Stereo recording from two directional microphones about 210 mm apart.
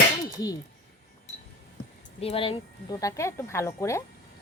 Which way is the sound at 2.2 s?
25° left (ahead or behind).